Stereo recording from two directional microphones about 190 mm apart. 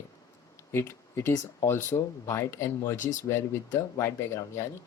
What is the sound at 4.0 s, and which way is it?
Speech, 15° left (ahead or behind).